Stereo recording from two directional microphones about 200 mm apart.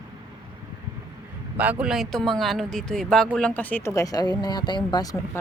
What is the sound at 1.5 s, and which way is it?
Speech, 10° right (ahead or behind).